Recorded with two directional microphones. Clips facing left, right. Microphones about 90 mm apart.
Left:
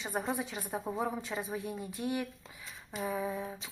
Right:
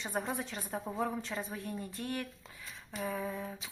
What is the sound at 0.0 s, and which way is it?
A woman's voice, centre (ahead or behind).